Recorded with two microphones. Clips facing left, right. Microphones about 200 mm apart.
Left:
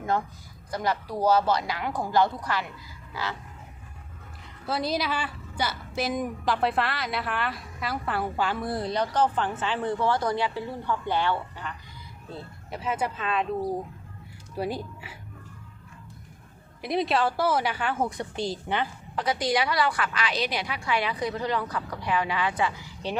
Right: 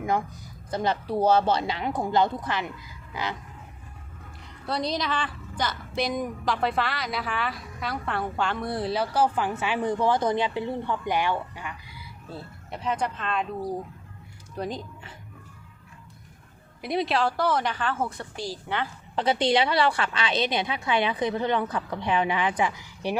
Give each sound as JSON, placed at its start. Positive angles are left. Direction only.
{"t": 0.7, "sound": "a woman's voice", "side_deg": -25}
{"t": 3.1, "sound": "a sound", "side_deg": -20}
{"t": 4.6, "sound": "a woman's voice", "side_deg": 5}
{"t": 12.7, "sound": "a woman's voice", "side_deg": 5}
{"t": 14.5, "sound": "speech", "side_deg": 10}
{"t": 16.8, "sound": "a woman's voice", "side_deg": 0}
{"t": 19.1, "sound": "a woman's voice", "side_deg": -25}